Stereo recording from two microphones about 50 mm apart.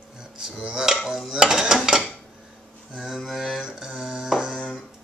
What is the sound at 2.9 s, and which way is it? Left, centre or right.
Music, centre.